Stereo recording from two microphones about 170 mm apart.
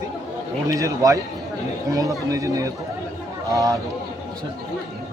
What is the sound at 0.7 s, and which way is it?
Speech, 20° right (ahead or behind).